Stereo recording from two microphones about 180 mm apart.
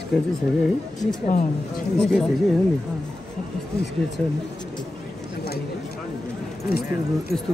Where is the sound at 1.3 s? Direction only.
40° left (ahead or behind).